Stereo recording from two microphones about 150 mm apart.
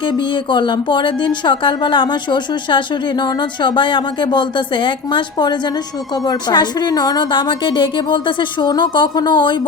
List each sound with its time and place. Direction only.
0.0 s speech: 35° left (ahead or behind)